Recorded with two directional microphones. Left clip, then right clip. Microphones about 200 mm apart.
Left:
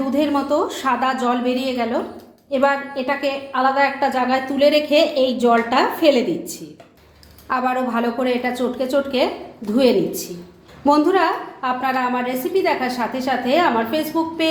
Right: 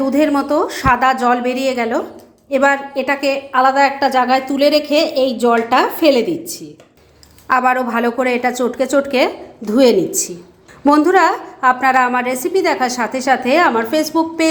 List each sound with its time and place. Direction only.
0.0 s a woman's voice: 40° right (ahead or behind)
10.8 s a woman's voice: 35° right (ahead or behind)